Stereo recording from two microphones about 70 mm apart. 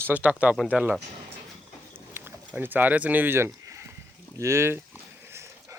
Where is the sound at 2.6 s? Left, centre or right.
Right.